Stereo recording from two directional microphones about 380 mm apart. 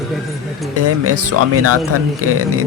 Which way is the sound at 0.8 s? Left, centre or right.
Right.